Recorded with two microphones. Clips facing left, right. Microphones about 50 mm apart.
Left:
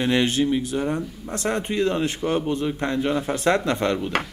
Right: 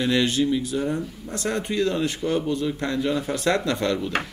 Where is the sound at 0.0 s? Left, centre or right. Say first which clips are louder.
Left 1 dB; left.